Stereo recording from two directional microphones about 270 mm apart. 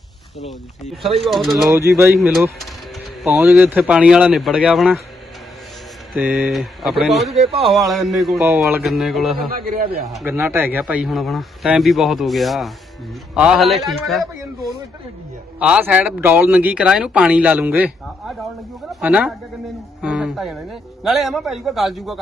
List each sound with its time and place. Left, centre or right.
0.3 s a man's voice: centre
6.1 s a man's voice: centre
7.3 s speech: right
7.6 s a man's voice: centre
9.6 s a man's voice: right
10.1 s a man's voice: centre
15.5 s a man's voice: centre